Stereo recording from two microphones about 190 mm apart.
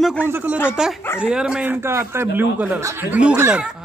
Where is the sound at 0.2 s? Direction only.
10° right (ahead or behind).